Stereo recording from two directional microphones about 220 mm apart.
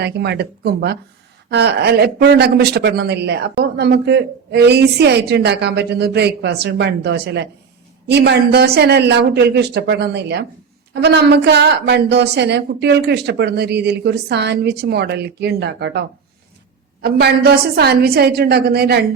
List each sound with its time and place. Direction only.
0.0 s speech: 50° right (ahead or behind)